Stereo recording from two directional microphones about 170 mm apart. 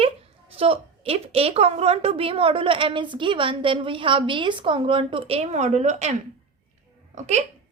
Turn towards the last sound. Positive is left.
turn(degrees=-45)  # may be behind; listen again after turning